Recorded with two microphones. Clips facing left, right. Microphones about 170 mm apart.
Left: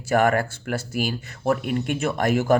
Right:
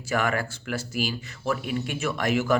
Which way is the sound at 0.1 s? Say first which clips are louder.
Left 6 dB; 50° left (ahead or behind).